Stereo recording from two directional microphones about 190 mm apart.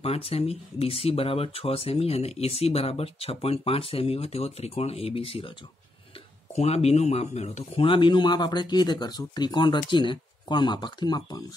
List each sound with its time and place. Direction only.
0.0 s speech: 30° left (ahead or behind)
6.5 s speech: 35° left (ahead or behind)